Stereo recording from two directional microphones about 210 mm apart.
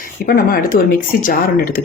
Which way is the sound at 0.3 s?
45° left (ahead or behind).